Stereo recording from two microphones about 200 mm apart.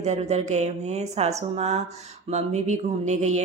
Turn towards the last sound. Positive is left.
turn(degrees=-35)  # may be behind; listen again after turning